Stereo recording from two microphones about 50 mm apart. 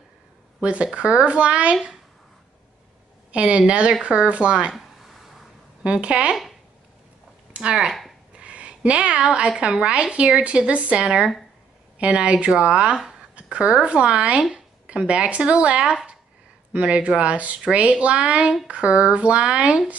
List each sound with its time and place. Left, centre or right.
0.6 s a woman's voice: right
3.3 s a woman's voice: right
4.7 s a sound: centre
5.9 s a woman's voice: right
7.5 s a woman's voice: centre